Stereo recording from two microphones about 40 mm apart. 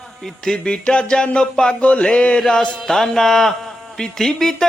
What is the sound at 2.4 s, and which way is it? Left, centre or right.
Speech, centre.